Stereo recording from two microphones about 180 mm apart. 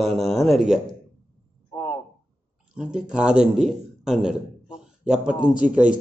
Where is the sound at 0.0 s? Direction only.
Centre (ahead or behind).